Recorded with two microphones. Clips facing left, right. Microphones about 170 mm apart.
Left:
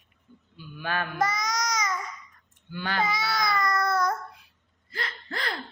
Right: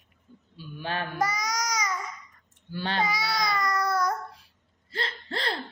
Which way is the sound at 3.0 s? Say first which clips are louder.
Left 1 dB; 10° right (ahead or behind).